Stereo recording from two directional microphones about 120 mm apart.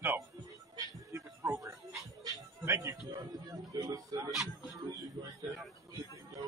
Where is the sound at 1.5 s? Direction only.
25° right (ahead or behind).